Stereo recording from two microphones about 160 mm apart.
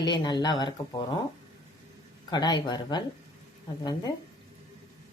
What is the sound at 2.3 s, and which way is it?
Speech, 25° left (ahead or behind).